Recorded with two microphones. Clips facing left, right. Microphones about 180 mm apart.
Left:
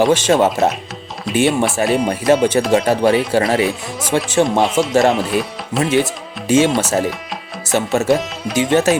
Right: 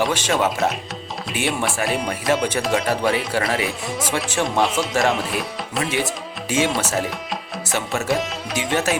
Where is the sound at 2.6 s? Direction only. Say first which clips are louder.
Left 7 dB; 30° left (ahead or behind).